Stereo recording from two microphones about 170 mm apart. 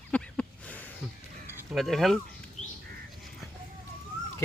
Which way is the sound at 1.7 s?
Centre (ahead or behind).